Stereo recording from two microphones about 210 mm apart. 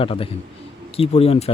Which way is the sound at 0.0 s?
25° left (ahead or behind).